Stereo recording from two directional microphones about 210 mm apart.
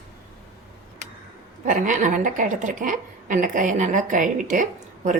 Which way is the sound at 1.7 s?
40° right (ahead or behind).